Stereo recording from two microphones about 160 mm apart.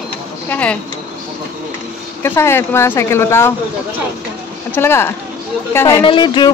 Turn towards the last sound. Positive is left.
turn(degrees=30)  # may be behind; listen again after turning